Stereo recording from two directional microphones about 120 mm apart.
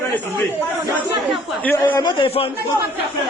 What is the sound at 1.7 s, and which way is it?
Speech, 15° left (ahead or behind).